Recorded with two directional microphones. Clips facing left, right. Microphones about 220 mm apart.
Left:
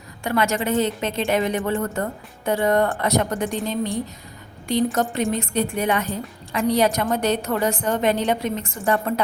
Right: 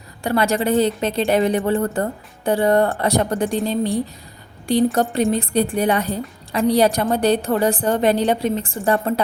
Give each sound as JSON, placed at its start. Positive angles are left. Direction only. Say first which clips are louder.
{"t": 0.2, "sound": "a woman's voice", "louder": "right 3 dB", "side_deg": -35}